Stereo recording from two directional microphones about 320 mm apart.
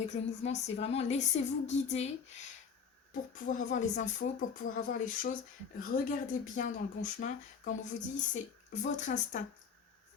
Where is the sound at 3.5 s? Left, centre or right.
Left.